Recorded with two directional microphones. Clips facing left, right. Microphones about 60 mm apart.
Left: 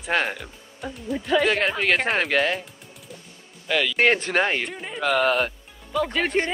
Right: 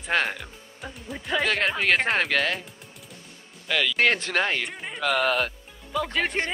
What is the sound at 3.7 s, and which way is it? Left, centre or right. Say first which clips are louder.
Speech: left 2 dB; centre.